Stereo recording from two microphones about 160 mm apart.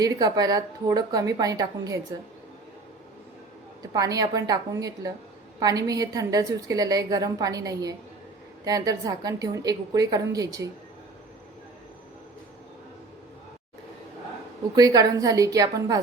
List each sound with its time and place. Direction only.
0.0 s a woman's voice: 25° right (ahead or behind)
3.9 s a woman's voice: 25° right (ahead or behind)
14.8 s a woman's voice: 25° right (ahead or behind)